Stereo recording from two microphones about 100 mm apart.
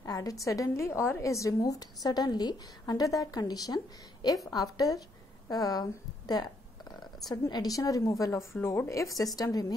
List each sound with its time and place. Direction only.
0.0 s a woman's voice: 35° left (ahead or behind)